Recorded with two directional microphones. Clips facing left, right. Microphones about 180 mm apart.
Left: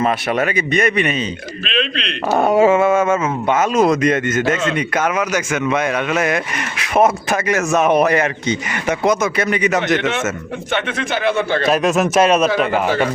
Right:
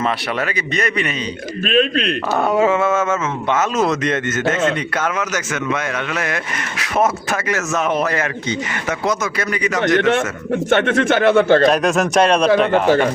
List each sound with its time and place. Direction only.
0.0 s a man's voice: 20° left (ahead or behind)
1.6 s a man's voice: 45° right (ahead or behind)
2.4 s speech: 20° left (ahead or behind)
10.8 s speech: 60° right (ahead or behind)
11.6 s speech: centre (ahead or behind)